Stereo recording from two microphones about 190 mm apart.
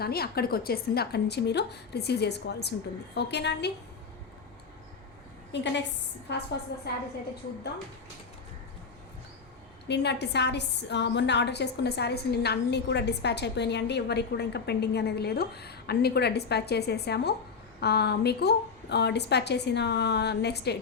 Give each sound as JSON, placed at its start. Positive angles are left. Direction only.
{"t": 0.0, "sound": "a woman's voice", "side_deg": 55}
{"t": 5.5, "sound": "a woman's voice", "side_deg": 65}
{"t": 9.9, "sound": "a woman's voice", "side_deg": 60}